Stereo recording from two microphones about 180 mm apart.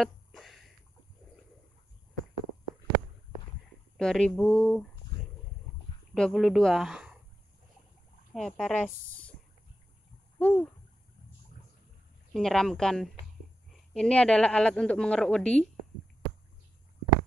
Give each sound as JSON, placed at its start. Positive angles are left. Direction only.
{"t": 0.0, "sound": "a sound", "side_deg": 0}
{"t": 3.9, "sound": "a woman's voice", "side_deg": 5}
{"t": 6.1, "sound": "a woman's voice", "side_deg": 5}
{"t": 8.4, "sound": "a woman's voice", "side_deg": 5}
{"t": 10.4, "sound": "owl", "side_deg": 5}
{"t": 12.4, "sound": "a woman's voice", "side_deg": 5}